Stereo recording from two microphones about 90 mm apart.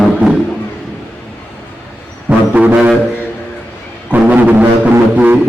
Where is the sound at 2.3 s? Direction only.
15° right (ahead or behind).